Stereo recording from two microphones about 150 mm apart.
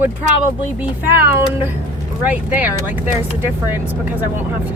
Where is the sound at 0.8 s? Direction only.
15° right (ahead or behind).